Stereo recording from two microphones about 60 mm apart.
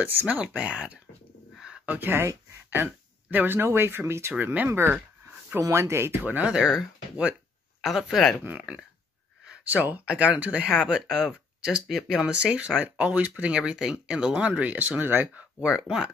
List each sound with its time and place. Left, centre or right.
0.0 s speech: right
1.9 s speech: right
4.4 s speech: right
4.6 s speech: right
6.2 s speech: right
6.5 s speech: centre
9.7 s speech: right
14.3 s speech: right
15.3 s speech: centre